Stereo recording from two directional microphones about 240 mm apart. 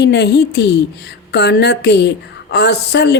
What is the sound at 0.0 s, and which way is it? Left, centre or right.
A woman's voice, left.